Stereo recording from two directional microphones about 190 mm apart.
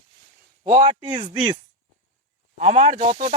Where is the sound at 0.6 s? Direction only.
30° right (ahead or behind).